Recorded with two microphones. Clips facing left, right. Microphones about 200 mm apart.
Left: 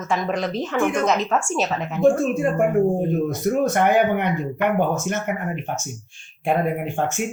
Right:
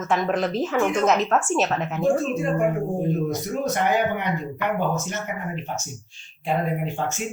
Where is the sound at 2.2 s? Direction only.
55° left (ahead or behind).